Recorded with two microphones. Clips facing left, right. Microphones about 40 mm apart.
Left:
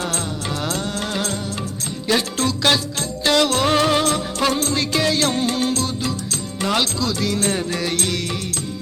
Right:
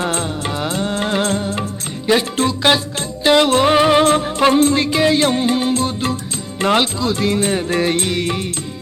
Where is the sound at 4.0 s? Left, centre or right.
Right.